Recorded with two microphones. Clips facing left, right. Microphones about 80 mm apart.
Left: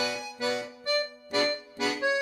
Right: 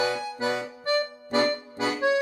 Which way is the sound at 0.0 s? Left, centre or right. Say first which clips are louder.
Right 4 dB; right.